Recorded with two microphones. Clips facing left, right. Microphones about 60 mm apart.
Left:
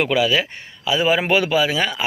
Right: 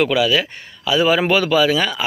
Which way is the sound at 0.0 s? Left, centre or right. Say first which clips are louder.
Right 2 dB; left.